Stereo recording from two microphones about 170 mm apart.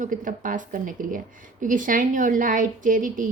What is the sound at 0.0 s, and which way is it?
A woman's voice, 50° right (ahead or behind).